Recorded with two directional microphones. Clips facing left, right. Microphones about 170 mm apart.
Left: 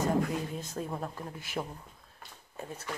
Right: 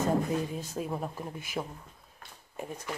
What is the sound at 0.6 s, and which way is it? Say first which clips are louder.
Speech: right 2 dB; 10° right (ahead or behind).